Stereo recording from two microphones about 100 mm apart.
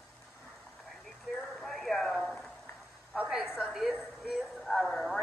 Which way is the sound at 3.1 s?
5° right (ahead or behind).